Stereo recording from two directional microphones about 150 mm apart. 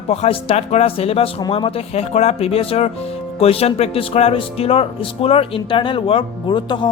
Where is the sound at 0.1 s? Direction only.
45° left (ahead or behind).